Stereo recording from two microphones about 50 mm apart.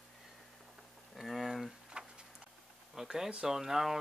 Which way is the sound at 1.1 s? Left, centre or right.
Centre.